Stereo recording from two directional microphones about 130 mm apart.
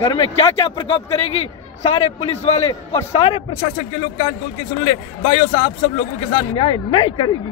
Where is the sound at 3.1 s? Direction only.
45° left (ahead or behind).